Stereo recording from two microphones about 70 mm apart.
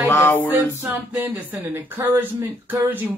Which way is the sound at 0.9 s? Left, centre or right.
Right.